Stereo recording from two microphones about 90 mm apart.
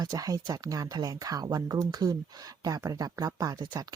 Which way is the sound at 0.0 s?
40° right (ahead or behind).